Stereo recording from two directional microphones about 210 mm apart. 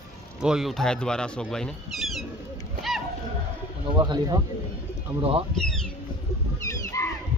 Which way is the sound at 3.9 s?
20° right (ahead or behind).